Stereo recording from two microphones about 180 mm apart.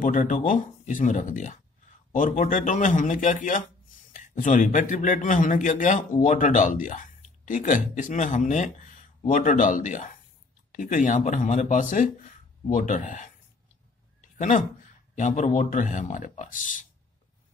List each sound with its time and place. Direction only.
0.0 s speech: 45° left (ahead or behind)
15.1 s speech: 45° left (ahead or behind)